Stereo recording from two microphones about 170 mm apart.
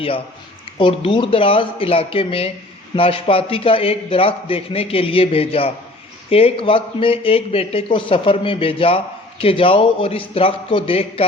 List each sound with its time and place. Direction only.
0.8 s a man's voice: 30° left (ahead or behind)